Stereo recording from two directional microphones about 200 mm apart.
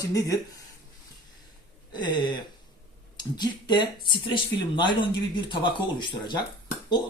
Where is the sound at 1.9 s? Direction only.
20° left (ahead or behind).